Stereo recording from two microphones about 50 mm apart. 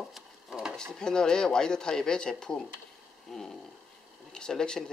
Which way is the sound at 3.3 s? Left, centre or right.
Centre.